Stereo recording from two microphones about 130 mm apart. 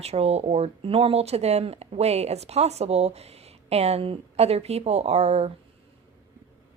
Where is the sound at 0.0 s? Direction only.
55° right (ahead or behind).